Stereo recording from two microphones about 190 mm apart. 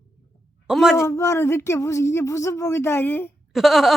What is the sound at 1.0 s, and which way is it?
Speech, 15° left (ahead or behind).